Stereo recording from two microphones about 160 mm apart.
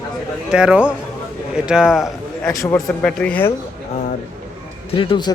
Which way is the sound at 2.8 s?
5° left (ahead or behind).